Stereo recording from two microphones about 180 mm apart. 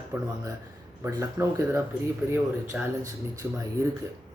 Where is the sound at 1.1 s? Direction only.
15° right (ahead or behind).